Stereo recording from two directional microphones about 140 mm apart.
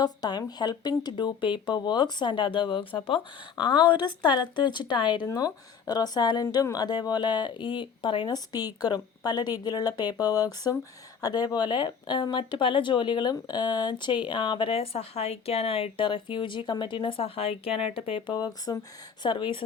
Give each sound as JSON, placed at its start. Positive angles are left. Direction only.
{"t": 0.0, "sound": "speech", "side_deg": 30}